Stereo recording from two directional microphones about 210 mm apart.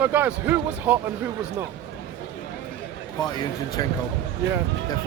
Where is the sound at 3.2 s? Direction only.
20° left (ahead or behind).